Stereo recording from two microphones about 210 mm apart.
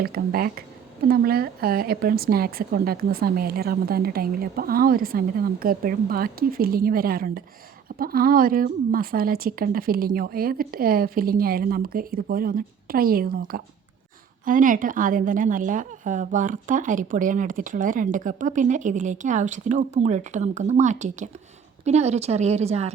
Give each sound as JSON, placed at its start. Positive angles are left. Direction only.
{"t": 0.0, "sound": "a woman's voice", "side_deg": -45}